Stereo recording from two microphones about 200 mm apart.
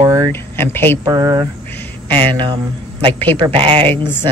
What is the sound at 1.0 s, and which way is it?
A man's voice, 20° right (ahead or behind).